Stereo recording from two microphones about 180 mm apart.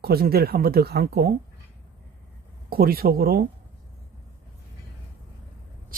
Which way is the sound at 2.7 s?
55° right (ahead or behind).